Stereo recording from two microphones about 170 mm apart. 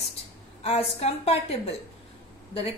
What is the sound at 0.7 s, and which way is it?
Speech, 35° left (ahead or behind).